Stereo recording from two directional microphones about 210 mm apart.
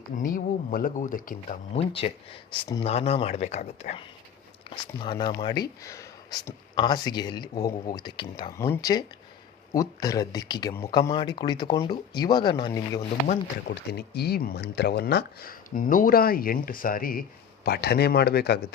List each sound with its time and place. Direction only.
0.2 s speech: 40° left (ahead or behind)
1.7 s speech: 25° left (ahead or behind)
13.2 s speech: 45° left (ahead or behind)